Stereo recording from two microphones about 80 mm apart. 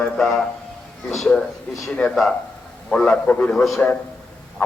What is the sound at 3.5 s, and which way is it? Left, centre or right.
Speech, centre.